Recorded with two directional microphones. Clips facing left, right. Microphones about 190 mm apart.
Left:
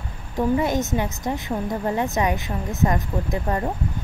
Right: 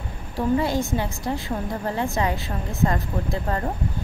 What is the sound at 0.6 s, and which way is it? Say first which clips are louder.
A woman's voice: left 1 dB; 20° left (ahead or behind).